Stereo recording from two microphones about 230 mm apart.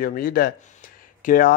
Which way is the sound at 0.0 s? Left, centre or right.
Left.